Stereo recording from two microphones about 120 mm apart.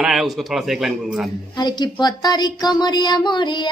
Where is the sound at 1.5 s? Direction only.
35° left (ahead or behind).